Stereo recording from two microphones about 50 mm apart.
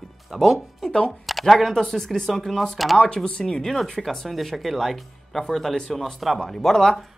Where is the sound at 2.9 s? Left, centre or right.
Centre.